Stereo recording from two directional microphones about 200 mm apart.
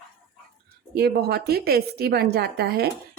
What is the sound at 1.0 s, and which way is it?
Speech, 55° right (ahead or behind).